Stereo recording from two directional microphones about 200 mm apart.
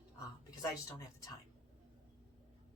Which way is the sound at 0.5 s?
15° left (ahead or behind).